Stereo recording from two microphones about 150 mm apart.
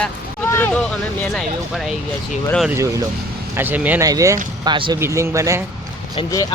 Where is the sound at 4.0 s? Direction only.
20° right (ahead or behind).